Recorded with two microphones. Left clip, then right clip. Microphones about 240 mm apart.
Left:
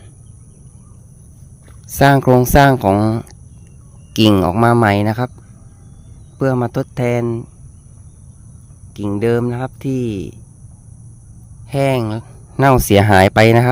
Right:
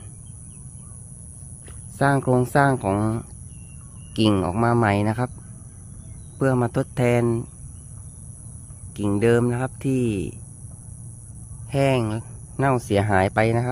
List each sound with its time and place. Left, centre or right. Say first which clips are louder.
2.0 s speech: left 9 dB; left
6.4 s speech: left 4 dB; centre
8.9 s speech: left 3 dB; centre
11.7 s speech: left 5 dB; centre